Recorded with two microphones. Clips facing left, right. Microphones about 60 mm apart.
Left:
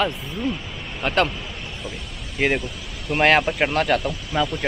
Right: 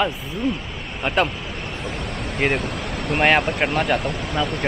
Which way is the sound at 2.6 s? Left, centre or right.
Right.